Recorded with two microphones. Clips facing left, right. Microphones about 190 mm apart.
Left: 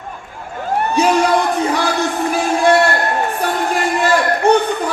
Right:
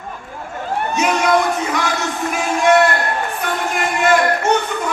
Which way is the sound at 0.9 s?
35° left (ahead or behind).